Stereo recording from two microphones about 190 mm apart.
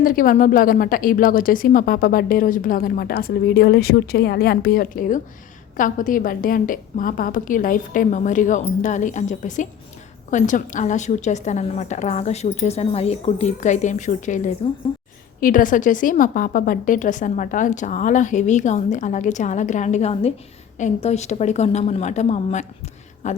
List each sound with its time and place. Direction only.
0.0 s a woman's voice: 45° left (ahead or behind)